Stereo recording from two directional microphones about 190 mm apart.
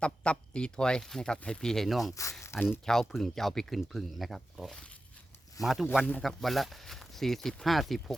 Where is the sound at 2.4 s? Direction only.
15° left (ahead or behind).